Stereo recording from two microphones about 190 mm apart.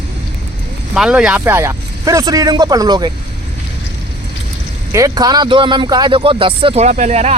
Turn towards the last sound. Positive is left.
turn(degrees=-35)  # may be behind; listen again after turning